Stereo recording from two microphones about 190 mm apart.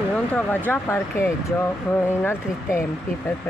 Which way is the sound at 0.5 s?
10° left (ahead or behind).